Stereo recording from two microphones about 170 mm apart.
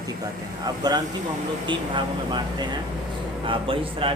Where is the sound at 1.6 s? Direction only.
30° right (ahead or behind).